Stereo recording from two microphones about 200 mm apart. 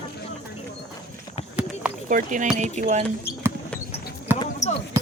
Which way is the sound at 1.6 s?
5° right (ahead or behind).